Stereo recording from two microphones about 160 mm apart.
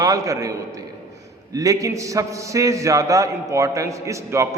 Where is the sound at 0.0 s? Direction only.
20° right (ahead or behind).